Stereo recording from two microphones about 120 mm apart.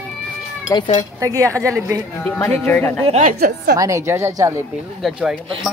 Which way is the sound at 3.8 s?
25° right (ahead or behind).